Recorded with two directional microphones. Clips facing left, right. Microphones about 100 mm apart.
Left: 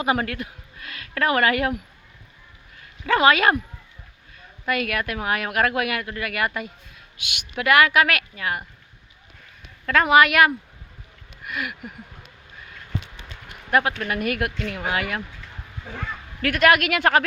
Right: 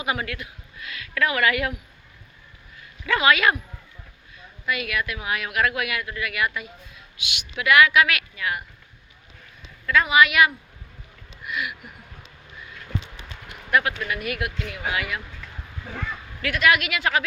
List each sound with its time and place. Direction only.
0.0 s speech: 35° left (ahead or behind)
3.1 s speech: 35° left (ahead or behind)
4.6 s a woman's voice: 45° left (ahead or behind)
9.8 s a woman's voice: 50° left (ahead or behind)
11.4 s a sound: 45° left (ahead or behind)
13.7 s speech: 35° left (ahead or behind)
14.2 s a woman's voice: 45° left (ahead or behind)
16.4 s a woman's voice: 50° left (ahead or behind)